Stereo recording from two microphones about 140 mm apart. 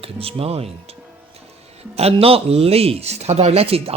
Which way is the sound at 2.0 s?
45° right (ahead or behind).